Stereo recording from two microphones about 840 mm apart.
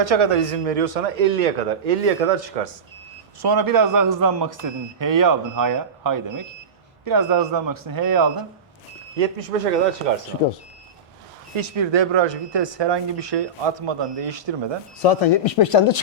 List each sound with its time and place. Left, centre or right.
0.0 s a man's voice: right
3.4 s a man's voice: right
9.1 s a man's voice: right
11.5 s speech: right
15.0 s speech: left